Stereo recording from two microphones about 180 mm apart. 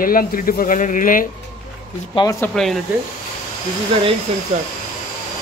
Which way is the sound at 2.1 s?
20° left (ahead or behind).